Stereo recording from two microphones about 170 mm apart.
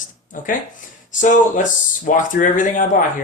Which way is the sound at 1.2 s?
50° left (ahead or behind).